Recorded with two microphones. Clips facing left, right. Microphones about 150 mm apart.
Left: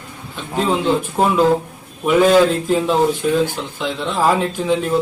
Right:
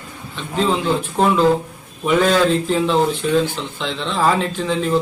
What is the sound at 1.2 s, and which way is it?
Speech, 5° left (ahead or behind).